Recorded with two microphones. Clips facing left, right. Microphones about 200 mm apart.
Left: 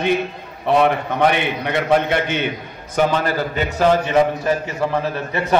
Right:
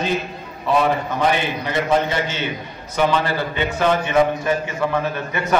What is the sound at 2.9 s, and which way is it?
A man's voice, 45° left (ahead or behind).